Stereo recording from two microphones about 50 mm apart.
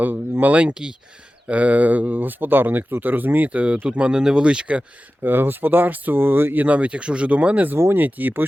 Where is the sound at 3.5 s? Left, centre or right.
Right.